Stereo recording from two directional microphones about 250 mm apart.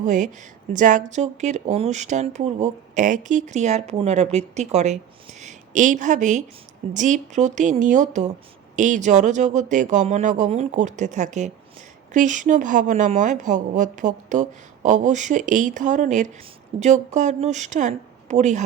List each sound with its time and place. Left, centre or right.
0.0 s a woman's voice: right